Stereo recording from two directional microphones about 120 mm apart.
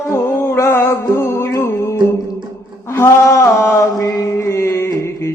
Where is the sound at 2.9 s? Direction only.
20° left (ahead or behind).